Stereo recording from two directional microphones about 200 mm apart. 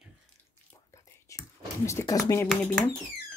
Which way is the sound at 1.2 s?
15° left (ahead or behind).